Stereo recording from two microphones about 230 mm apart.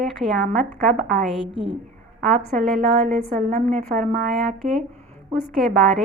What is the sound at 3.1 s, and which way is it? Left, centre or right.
A woman's voice, right.